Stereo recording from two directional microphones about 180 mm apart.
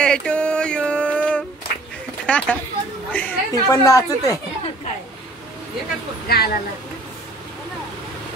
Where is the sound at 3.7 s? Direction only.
20° left (ahead or behind).